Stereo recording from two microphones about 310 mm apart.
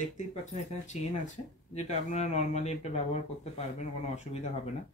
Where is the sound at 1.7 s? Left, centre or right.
Left.